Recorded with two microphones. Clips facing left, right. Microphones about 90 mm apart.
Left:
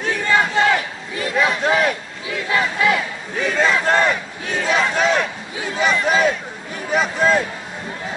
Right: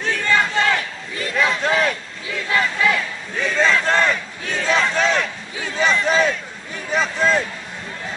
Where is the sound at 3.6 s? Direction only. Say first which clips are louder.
Even; 10° left (ahead or behind).